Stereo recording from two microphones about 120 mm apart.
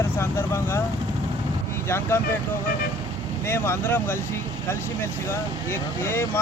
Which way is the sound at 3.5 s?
20° left (ahead or behind).